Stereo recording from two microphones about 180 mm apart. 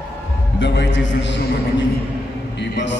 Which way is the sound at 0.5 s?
75° left (ahead or behind).